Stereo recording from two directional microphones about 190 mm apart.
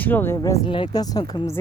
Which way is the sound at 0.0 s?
10° left (ahead or behind).